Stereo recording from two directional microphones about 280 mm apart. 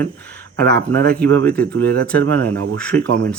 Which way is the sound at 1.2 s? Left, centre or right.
Centre.